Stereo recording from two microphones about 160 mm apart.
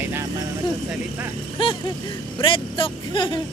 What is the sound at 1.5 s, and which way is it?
Speech, 35° left (ahead or behind).